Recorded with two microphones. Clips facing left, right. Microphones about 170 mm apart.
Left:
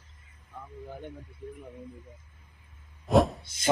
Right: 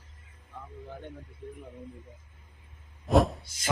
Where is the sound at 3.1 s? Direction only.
Centre (ahead or behind).